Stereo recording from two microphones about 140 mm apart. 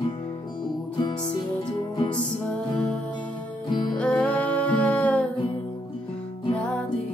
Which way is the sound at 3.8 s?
10° left (ahead or behind).